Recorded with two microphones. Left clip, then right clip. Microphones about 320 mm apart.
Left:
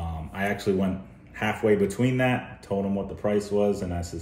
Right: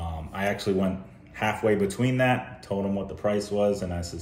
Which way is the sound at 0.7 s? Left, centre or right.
Centre.